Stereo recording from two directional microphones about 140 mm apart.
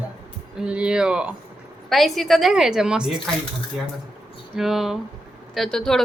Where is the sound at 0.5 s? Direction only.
10° right (ahead or behind).